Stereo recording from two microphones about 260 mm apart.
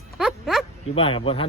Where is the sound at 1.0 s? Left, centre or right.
Left.